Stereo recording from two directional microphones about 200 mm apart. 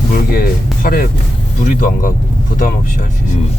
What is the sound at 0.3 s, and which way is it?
Speech, 45° left (ahead or behind).